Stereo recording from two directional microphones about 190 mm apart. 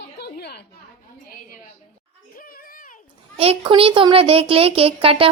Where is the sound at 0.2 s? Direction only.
60° left (ahead or behind).